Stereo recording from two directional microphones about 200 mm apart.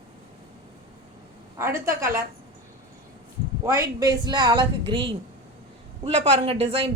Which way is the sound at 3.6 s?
15° right (ahead or behind).